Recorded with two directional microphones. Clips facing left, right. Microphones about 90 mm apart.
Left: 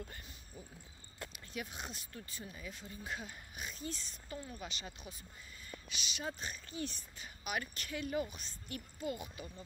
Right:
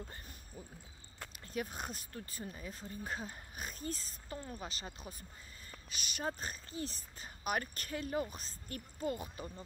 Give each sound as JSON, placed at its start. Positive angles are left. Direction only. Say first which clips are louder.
{"t": 0.5, "sound": "speech", "louder": "right 1 dB", "side_deg": -45}